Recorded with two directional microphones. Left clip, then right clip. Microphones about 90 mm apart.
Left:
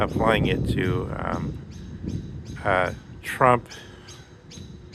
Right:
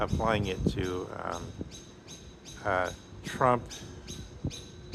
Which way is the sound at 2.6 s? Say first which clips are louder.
Left 7 dB; 60° left (ahead or behind).